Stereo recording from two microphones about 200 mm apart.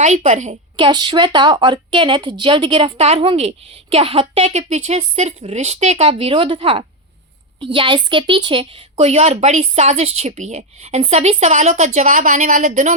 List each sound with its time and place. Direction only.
0.0 s speech: 35° right (ahead or behind)
0.8 s a woman's voice: 25° right (ahead or behind); by 12.9 s 40° right (ahead or behind)